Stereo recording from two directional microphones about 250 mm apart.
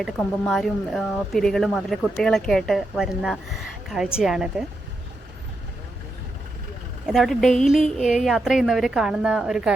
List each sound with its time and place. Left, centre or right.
0.0 s a woman's voice: centre
7.1 s a woman's voice: centre